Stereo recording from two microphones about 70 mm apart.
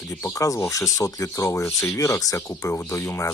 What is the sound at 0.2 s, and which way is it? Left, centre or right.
Speech, left.